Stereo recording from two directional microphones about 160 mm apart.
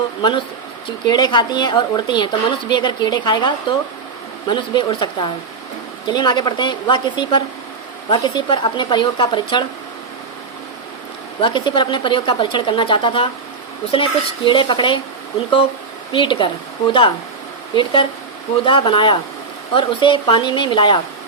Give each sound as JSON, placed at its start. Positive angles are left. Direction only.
{"t": 0.2, "sound": "a woman's voice", "side_deg": 30}
{"t": 11.3, "sound": "speech", "side_deg": 30}
{"t": 16.1, "sound": "speech", "side_deg": 30}
{"t": 18.6, "sound": "speech", "side_deg": 30}